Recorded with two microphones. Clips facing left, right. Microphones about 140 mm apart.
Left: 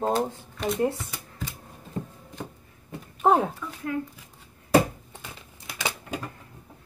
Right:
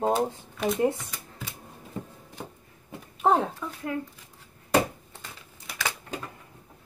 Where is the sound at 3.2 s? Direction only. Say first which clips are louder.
Left 2 dB; 5° left (ahead or behind).